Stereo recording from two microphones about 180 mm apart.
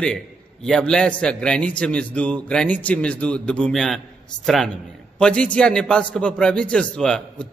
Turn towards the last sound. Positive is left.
turn(degrees=5)  # may be behind; listen again after turning